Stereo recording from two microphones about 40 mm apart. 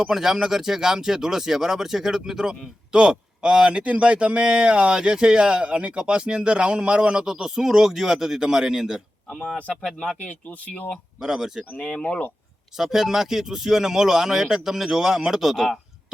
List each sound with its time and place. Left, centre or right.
0.0 s speech: centre
7.3 s speech: centre
10.2 s speech: left
11.2 s speech: centre
11.8 s speech: centre
12.7 s speech: centre